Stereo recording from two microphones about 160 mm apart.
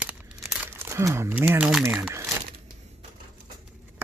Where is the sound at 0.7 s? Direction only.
15° right (ahead or behind).